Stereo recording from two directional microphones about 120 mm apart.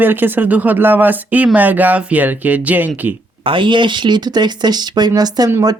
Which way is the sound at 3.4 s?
45° right (ahead or behind).